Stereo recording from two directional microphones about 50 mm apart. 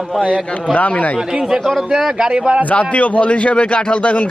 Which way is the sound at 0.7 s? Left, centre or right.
Left.